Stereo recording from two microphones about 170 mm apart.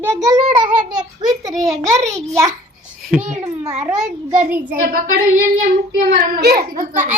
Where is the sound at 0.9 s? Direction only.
25° right (ahead or behind).